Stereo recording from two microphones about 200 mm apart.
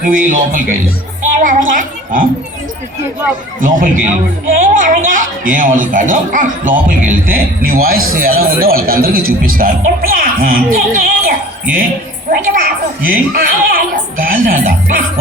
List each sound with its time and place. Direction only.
0.0 s speech: 40° right (ahead or behind)
1.3 s a sound: 40° right (ahead or behind)
3.6 s a woman's voice: 45° right (ahead or behind)